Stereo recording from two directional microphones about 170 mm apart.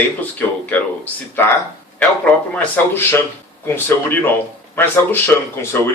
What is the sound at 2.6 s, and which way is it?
Speech, 15° left (ahead or behind).